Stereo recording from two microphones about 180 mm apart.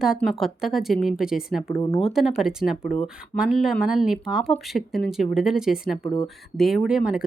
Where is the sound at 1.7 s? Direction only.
15° left (ahead or behind).